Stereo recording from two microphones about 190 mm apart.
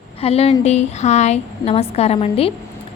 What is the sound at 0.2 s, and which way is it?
A woman's voice, 30° left (ahead or behind).